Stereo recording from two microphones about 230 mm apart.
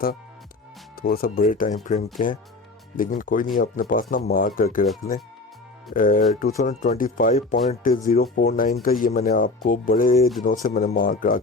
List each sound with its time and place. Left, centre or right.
0.9 s speech: left
5.9 s speech: left